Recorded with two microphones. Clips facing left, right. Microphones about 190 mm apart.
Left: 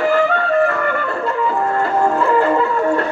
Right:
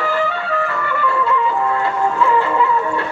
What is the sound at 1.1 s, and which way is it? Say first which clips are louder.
Music: right 1 dB; 50° left (ahead or behind).